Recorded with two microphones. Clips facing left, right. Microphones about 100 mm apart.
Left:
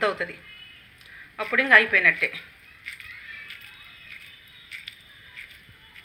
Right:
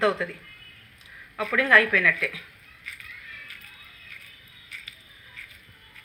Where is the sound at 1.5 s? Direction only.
30° right (ahead or behind).